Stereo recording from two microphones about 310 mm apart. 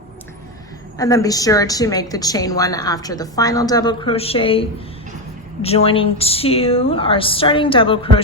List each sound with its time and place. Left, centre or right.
0.9 s a woman's voice: centre
5.6 s a woman's voice: centre